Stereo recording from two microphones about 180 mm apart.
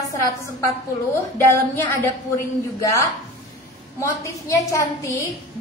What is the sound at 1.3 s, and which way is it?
Speech, 15° left (ahead or behind).